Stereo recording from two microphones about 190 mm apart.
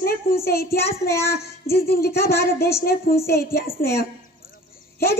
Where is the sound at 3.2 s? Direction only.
55° left (ahead or behind).